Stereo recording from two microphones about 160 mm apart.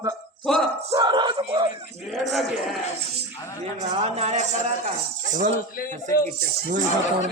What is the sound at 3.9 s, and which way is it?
A man's voice, 40° right (ahead or behind).